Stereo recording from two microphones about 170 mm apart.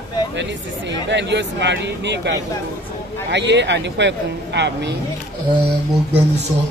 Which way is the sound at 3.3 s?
90° right.